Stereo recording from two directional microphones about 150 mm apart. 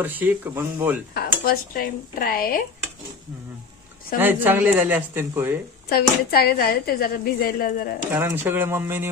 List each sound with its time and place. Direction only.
0.0 s speech: 10° right (ahead or behind)
1.1 s speech: 85° left
4.2 s speech: 15° right (ahead or behind)
5.9 s a woman's voice: 90° left
8.1 s speech: 15° right (ahead or behind)